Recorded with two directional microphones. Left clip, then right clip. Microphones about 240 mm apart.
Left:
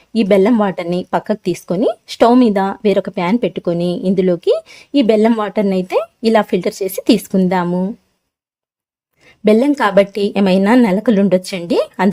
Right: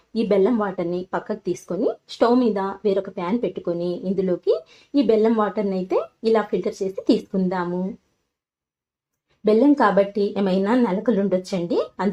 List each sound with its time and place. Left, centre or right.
0.1 s speech: left
9.4 s speech: left